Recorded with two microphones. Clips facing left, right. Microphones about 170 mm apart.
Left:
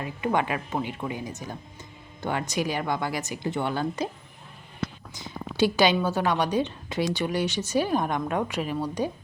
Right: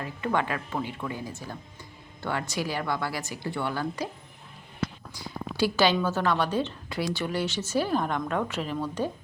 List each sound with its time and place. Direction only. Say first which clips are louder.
0.0 s a woman's voice: left 2 dB; 15° left (ahead or behind)
5.1 s a woman's voice: even; 20° left (ahead or behind)